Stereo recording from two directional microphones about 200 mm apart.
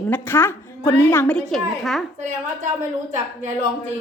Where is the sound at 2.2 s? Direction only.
35° right (ahead or behind).